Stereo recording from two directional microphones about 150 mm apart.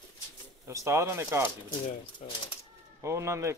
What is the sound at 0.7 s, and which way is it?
Speech, 20° right (ahead or behind).